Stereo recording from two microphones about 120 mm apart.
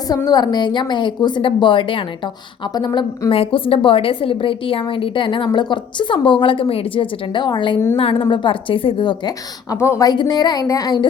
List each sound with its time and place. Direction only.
0.3 s a woman's voice: 35° left (ahead or behind)
9.7 s a woman's voice: 20° left (ahead or behind)
10.1 s a woman's voice: 35° left (ahead or behind)